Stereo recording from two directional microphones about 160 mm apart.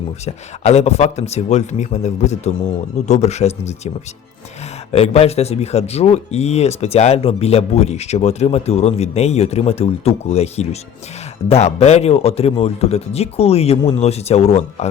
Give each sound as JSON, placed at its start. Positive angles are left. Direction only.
{"t": 0.3, "sound": "speech", "side_deg": 45}
{"t": 4.9, "sound": "speech", "side_deg": 40}